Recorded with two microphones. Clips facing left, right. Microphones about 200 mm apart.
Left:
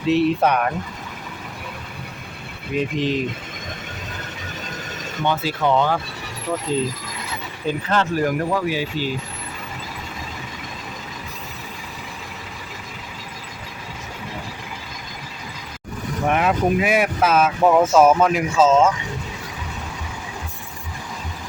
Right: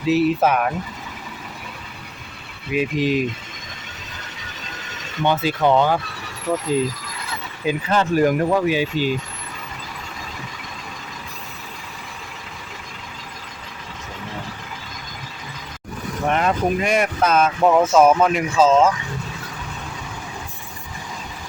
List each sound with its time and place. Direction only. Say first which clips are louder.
0.0 s speech: even; 5° right (ahead or behind)
2.7 s speech: right 2 dB; 10° right (ahead or behind)
5.2 s speech: right 3 dB; 20° right (ahead or behind)
7.7 s speech: right 2 dB; 10° right (ahead or behind)
16.2 s speech: left 1 dB; 5° left (ahead or behind)